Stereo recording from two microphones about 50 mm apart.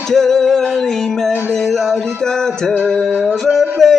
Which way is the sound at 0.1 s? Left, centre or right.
Centre.